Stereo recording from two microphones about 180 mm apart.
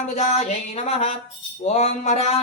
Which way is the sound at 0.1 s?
40° left (ahead or behind).